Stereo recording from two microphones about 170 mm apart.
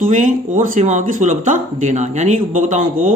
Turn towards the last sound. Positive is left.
turn(degrees=-45)  # may be behind; listen again after turning